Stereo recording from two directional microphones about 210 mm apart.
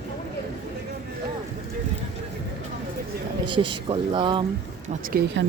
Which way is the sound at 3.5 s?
25° right (ahead or behind).